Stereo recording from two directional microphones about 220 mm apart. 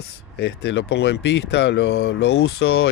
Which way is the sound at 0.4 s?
50° left (ahead or behind).